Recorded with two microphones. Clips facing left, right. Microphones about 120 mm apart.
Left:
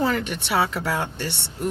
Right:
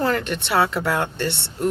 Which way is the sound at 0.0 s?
10° left (ahead or behind).